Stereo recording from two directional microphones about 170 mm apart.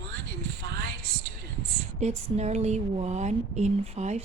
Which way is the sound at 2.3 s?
40° right (ahead or behind).